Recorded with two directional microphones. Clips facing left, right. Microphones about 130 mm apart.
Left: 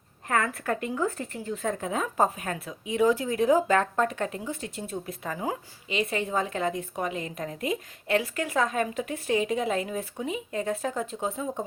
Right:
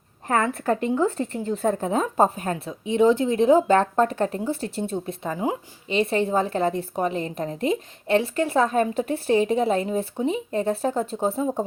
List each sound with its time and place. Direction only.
0.3 s a woman's voice: 25° right (ahead or behind)